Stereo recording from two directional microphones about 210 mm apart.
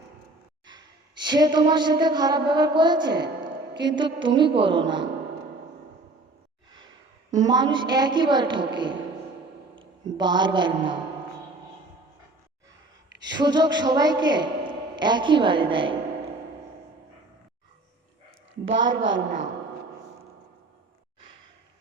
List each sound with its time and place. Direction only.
1.3 s music: 20° right (ahead or behind)
7.4 s music: 20° right (ahead or behind)
9.7 s a man's voice: 20° right (ahead or behind)
13.3 s a woman's voice: 20° right (ahead or behind)
18.7 s a woman's voice: 60° right (ahead or behind)